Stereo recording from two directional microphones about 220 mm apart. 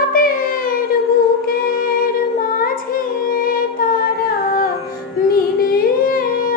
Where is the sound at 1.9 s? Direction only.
40° left (ahead or behind).